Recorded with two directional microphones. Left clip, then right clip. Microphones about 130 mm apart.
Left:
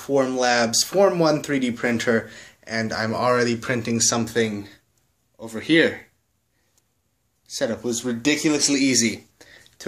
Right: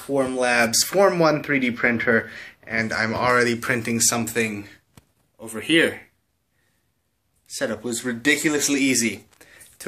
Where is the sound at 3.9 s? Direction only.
50° left (ahead or behind).